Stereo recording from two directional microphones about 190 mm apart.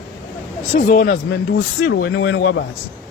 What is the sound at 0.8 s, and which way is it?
Speech, 45° left (ahead or behind).